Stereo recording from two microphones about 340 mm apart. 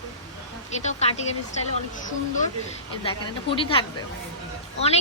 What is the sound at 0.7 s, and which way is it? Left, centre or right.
Speech, centre.